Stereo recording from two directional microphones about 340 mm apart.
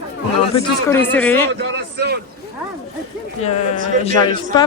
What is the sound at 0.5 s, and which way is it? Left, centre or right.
Speech, centre.